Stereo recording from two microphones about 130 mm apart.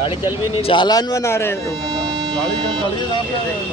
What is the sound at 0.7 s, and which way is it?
Speech, 35° left (ahead or behind).